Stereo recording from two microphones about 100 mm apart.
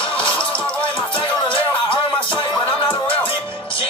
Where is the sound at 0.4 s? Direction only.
15° left (ahead or behind).